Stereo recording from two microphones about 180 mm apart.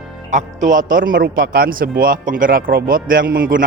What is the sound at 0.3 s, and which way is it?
A man's voice, 45° right (ahead or behind).